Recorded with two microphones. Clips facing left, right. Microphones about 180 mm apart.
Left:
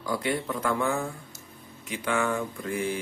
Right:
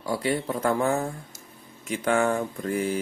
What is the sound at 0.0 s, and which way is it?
Mantra, 30° right (ahead or behind).